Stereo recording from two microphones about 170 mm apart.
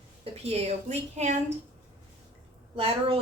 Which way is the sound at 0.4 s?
40° right (ahead or behind).